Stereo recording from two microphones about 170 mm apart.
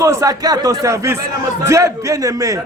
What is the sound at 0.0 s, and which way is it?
A man's voice, 15° right (ahead or behind).